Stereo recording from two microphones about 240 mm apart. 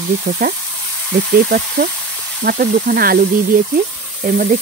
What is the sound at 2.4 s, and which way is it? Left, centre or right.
Speech, right.